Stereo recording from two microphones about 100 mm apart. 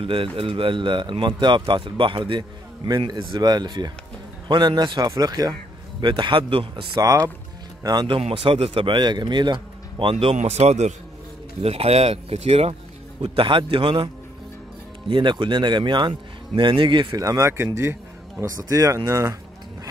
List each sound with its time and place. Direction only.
0.0 s speech: 65° right (ahead or behind); by 5.5 s 40° right (ahead or behind)
5.9 s a man's voice: 50° right (ahead or behind)
7.0 s speech: 35° right (ahead or behind)
8.1 s a man's voice: 65° right (ahead or behind)
10.1 s a man's voice: 90° right
13.2 s a man's voice: 60° right (ahead or behind)
15.0 s speech: 50° right (ahead or behind); by 19.3 s 25° right (ahead or behind)